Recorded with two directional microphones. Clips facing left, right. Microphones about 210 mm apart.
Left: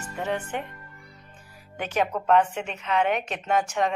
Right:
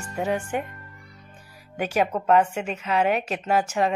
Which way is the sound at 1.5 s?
10° right (ahead or behind).